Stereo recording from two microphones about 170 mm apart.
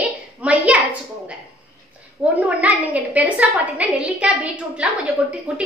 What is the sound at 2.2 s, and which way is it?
A woman's voice, 10° right (ahead or behind).